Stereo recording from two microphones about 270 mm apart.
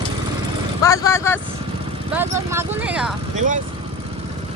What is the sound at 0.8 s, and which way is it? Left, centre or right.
Vehicle, centre.